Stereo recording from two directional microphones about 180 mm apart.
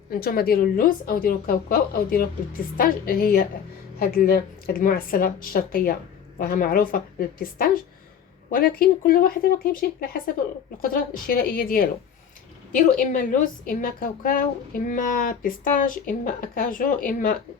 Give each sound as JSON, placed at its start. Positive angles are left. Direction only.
{"t": 0.1, "sound": "a woman's voice", "side_deg": 55}